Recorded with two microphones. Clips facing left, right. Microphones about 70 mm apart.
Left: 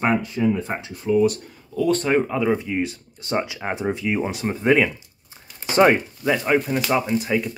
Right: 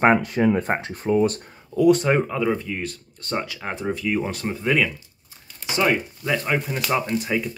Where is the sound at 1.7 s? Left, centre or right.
Centre.